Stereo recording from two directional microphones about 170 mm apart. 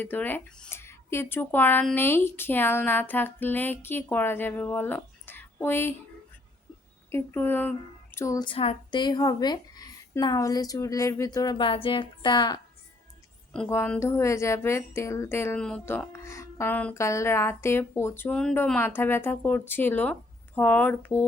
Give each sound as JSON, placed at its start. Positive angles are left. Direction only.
{"t": 0.0, "sound": "a woman's voice", "side_deg": 10}
{"t": 7.1, "sound": "speech", "side_deg": 10}
{"t": 8.4, "sound": "a woman's voice", "side_deg": 30}
{"t": 13.5, "sound": "a woman's voice", "side_deg": 10}